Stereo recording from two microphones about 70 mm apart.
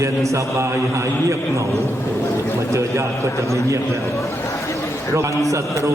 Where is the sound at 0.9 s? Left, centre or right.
Right.